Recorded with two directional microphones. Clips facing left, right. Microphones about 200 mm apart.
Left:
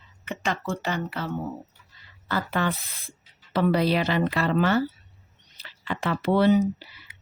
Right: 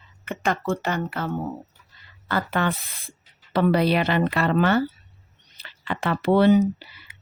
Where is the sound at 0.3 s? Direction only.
55° right (ahead or behind).